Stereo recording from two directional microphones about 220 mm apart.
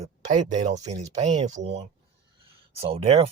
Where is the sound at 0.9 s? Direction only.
30° right (ahead or behind).